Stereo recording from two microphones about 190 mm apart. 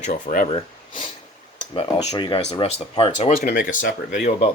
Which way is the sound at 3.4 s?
50° left (ahead or behind).